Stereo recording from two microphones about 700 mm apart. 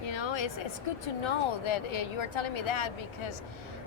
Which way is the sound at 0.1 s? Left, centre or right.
Left.